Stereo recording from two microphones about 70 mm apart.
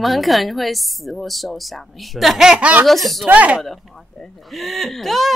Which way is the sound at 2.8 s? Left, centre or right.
Centre.